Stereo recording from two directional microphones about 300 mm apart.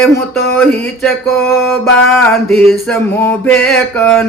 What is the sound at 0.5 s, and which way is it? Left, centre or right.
Mantra, centre.